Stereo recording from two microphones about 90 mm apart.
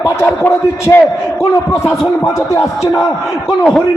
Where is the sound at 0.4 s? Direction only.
25° left (ahead or behind).